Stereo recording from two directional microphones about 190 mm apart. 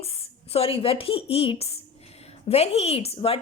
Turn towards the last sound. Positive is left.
turn(degrees=30)  # may be behind; listen again after turning